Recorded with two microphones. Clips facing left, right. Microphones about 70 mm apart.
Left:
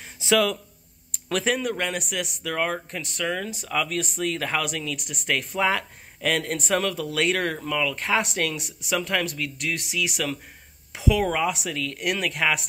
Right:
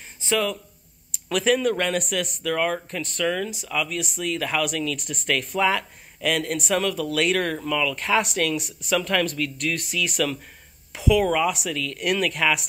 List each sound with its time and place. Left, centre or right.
0.2 s speech: left
1.1 s a sound: left
1.6 s speech: centre
2.5 s speech: left
3.0 s speech: centre
3.6 s speech: left; by 10.3 s centre
10.9 s speech: left